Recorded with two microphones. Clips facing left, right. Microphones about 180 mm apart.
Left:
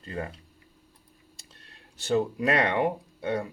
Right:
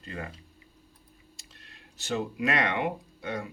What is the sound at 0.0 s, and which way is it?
Speech, 35° left (ahead or behind).